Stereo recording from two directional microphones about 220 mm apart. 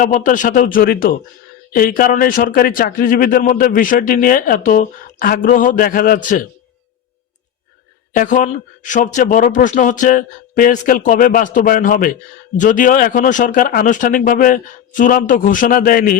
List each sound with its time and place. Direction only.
0.0 s speech: 35° left (ahead or behind)
8.1 s speech: 35° left (ahead or behind)